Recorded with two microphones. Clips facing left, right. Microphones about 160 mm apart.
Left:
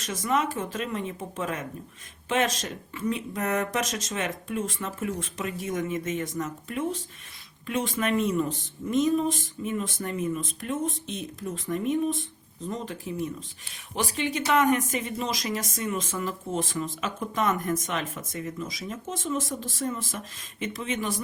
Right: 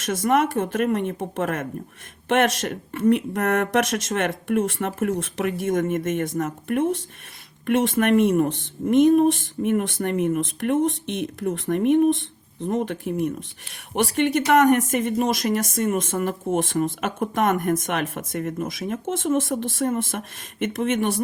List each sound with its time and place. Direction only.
0.0 s speech: 70° right (ahead or behind)
1.4 s speech: 60° right (ahead or behind)
2.3 s speech: 70° right (ahead or behind)
5.8 s speech: 55° right (ahead or behind)
7.7 s speech: 70° right (ahead or behind)
18.3 s speech: 55° right (ahead or behind); by 21.2 s 70° right (ahead or behind)